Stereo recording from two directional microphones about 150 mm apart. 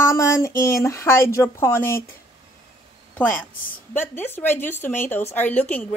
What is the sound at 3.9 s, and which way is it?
Speech, 15° left (ahead or behind).